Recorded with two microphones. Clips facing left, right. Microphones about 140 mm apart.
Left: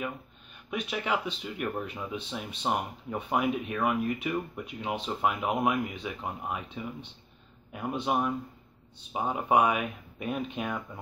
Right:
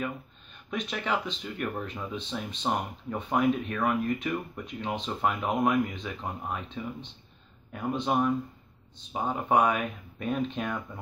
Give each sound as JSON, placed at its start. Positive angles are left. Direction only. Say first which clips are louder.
{"t": 0.7, "sound": "speech", "louder": "even", "side_deg": 10}